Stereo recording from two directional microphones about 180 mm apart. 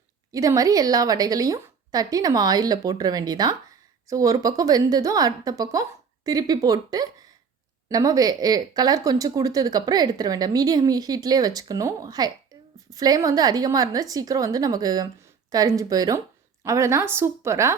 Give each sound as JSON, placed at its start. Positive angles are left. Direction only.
{"t": 0.3, "sound": "a woman's voice", "side_deg": -20}